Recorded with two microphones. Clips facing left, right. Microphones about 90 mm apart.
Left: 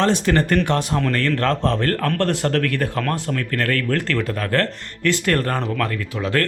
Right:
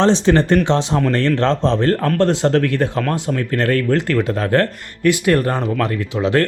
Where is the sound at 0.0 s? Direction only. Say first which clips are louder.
Right 4 dB; 25° right (ahead or behind).